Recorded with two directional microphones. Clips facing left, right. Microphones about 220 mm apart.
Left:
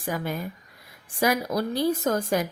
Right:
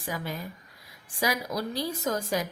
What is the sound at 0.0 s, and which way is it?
A woman's voice, 50° left (ahead or behind).